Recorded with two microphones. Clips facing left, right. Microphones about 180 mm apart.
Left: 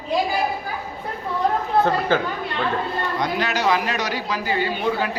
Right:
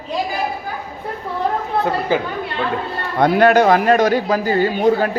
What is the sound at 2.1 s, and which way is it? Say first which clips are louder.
Speech: right 4 dB; 10° right (ahead or behind).